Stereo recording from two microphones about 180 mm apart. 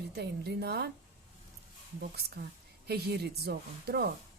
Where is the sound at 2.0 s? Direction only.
60° right (ahead or behind).